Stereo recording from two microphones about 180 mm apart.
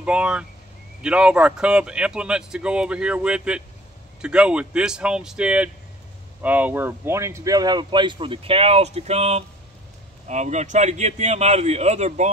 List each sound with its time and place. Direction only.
0.0 s speech: 5° right (ahead or behind); by 12.3 s 40° right (ahead or behind)